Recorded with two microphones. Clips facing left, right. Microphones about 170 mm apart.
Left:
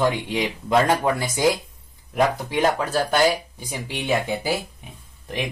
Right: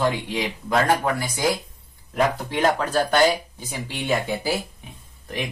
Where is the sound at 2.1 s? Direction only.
10° left (ahead or behind).